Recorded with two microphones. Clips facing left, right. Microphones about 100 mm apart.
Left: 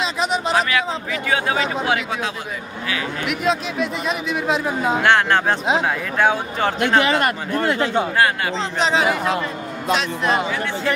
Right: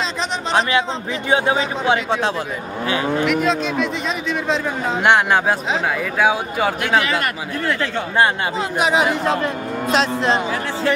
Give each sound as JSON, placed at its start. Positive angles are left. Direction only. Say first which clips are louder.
{"t": 0.6, "sound": "speech", "louder": "right 2 dB", "side_deg": -30}
{"t": 3.4, "sound": "speech", "louder": "right 2 dB", "side_deg": 5}
{"t": 5.0, "sound": "speech", "louder": "right 3 dB", "side_deg": -15}
{"t": 7.0, "sound": "a man's voice", "louder": "left 2 dB", "side_deg": 30}
{"t": 8.7, "sound": "speech", "louder": "right 2 dB", "side_deg": -10}
{"t": 9.9, "sound": "speech", "louder": "right 3 dB", "side_deg": -30}